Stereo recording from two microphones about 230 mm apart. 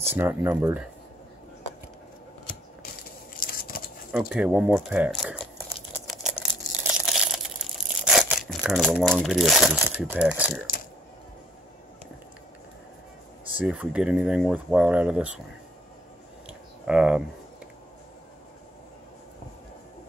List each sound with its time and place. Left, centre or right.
0.1 s speech: centre
3.3 s a sound: left
4.1 s speech: centre
6.8 s a sound: centre
13.6 s speech: centre
16.4 s clicking: centre